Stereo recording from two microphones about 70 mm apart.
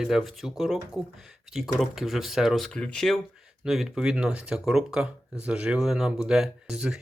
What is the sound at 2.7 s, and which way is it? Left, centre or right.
Speech, centre.